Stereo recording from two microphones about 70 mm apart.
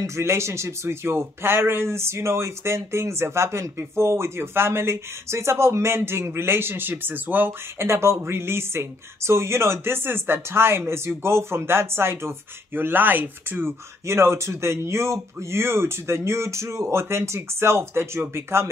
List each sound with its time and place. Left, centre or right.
0.0 s speech: right
7.8 s speech: right